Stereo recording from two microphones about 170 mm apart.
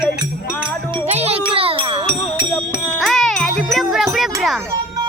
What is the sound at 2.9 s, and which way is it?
Music, centre (ahead or behind).